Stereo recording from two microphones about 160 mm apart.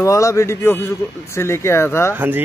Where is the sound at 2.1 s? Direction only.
10° right (ahead or behind).